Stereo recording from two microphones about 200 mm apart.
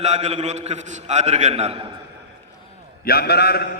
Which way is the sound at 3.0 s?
50° left (ahead or behind).